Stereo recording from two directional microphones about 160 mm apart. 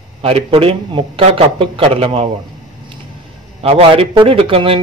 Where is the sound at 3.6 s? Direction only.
40° right (ahead or behind).